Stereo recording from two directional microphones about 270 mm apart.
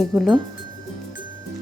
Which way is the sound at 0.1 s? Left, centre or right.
Centre.